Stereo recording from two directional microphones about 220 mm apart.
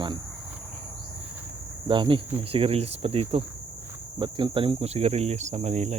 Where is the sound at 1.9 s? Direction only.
20° right (ahead or behind).